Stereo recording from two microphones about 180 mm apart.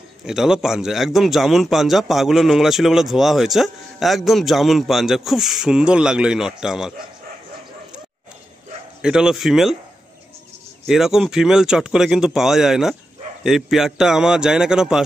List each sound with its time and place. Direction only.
0.2 s a man's voice: 5° right (ahead or behind)
9.0 s a man's voice: 5° right (ahead or behind)
10.9 s a man's voice: centre (ahead or behind)